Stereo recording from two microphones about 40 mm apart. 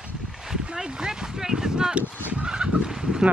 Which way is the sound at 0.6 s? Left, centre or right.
Right.